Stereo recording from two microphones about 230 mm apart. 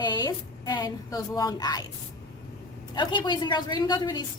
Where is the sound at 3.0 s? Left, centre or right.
Centre.